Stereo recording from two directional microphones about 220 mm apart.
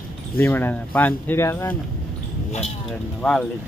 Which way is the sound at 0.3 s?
10° left (ahead or behind).